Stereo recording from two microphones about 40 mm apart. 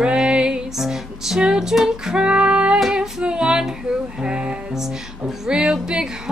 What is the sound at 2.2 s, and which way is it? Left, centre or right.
Music, right.